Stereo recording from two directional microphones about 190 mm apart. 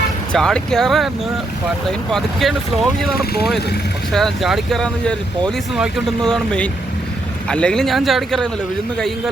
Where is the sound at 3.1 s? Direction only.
55° left (ahead or behind).